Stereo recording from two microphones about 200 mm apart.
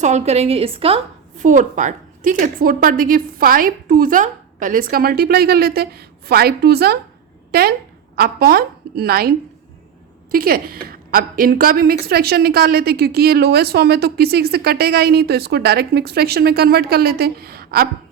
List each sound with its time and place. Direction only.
0.0 s a woman's voice: 35° right (ahead or behind); by 9.3 s 50° right (ahead or behind)
10.3 s a woman's voice: 45° right (ahead or behind)